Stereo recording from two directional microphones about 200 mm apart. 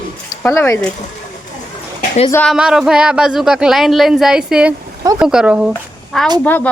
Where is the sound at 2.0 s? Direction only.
35° left (ahead or behind).